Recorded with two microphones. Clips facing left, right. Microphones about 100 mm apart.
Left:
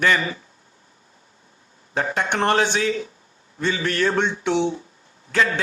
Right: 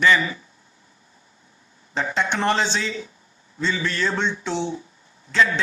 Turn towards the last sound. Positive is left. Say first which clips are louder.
# right 1 dB
turn(degrees=50)  # may be behind; listen again after turning